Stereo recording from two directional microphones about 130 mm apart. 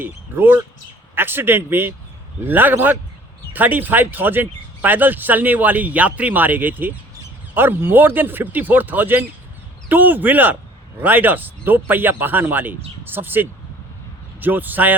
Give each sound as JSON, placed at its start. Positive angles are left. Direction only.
{"t": 0.0, "sound": "speech", "side_deg": -15}